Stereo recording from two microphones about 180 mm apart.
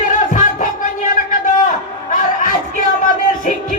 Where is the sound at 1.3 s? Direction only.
45° left (ahead or behind).